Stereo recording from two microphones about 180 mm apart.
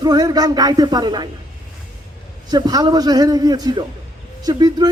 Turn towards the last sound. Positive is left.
turn(degrees=-20)  # may be behind; listen again after turning